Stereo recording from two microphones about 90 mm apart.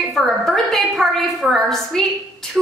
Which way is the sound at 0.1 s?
5° left (ahead or behind).